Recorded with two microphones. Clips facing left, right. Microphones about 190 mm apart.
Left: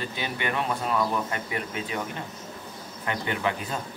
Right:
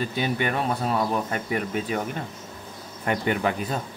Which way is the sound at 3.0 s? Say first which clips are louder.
Right 4 dB; 45° right (ahead or behind).